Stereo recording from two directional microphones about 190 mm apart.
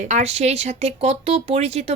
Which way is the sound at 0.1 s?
35° right (ahead or behind).